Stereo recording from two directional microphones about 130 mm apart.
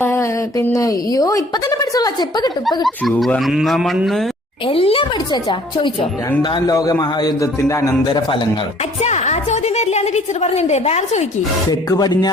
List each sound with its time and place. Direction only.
0.0 s speech: 20° left (ahead or behind)
2.8 s speech: 5° left (ahead or behind)
4.6 s speech: 45° left (ahead or behind)
6.4 s music: 35° left (ahead or behind)
8.1 s music: 40° left (ahead or behind)
9.0 s a woman's voice: 60° left (ahead or behind)
11.7 s music: 30° left (ahead or behind)